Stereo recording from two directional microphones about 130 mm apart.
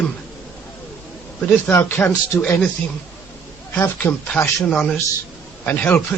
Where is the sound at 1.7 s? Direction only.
15° left (ahead or behind).